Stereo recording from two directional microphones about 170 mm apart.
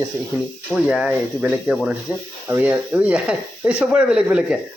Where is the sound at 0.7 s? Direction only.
5° right (ahead or behind).